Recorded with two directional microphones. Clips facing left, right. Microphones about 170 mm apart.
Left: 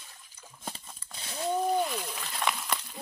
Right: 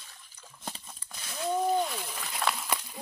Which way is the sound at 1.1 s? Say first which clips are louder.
Left 1 dB; 25° left (ahead or behind).